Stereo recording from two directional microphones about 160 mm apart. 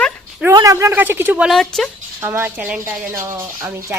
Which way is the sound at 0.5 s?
20° right (ahead or behind).